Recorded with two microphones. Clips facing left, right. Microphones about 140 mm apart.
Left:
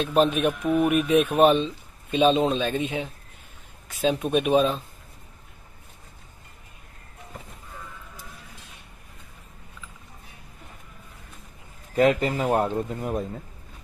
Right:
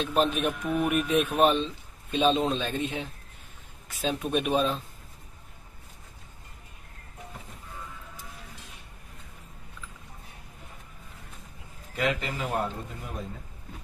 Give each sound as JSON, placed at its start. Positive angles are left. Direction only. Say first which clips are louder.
{"t": 0.0, "sound": "speech", "louder": "left 4 dB", "side_deg": 0}
{"t": 11.9, "sound": "speech", "louder": "left 9 dB", "side_deg": 40}